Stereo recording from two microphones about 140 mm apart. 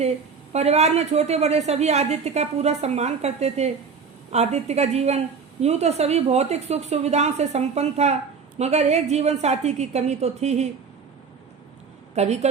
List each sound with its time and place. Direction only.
0.5 s a woman's voice: 50° right (ahead or behind)
12.1 s a woman's voice: 50° right (ahead or behind)